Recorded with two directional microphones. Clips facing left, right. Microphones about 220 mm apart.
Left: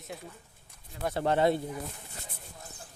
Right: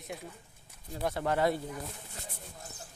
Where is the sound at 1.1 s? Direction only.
25° left (ahead or behind).